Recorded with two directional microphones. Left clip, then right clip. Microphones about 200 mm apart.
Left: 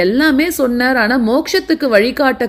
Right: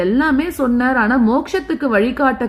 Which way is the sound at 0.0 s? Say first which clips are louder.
Left 4 dB; 20° left (ahead or behind).